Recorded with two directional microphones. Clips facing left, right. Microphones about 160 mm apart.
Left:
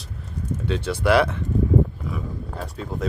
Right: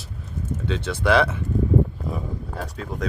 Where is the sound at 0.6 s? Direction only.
5° left (ahead or behind).